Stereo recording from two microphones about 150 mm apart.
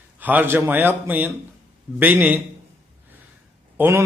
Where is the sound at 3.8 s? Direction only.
15° right (ahead or behind).